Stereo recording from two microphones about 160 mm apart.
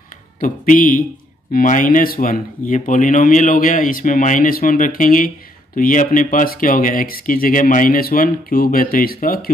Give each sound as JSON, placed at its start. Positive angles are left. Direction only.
{"t": 0.4, "sound": "speech", "side_deg": 60}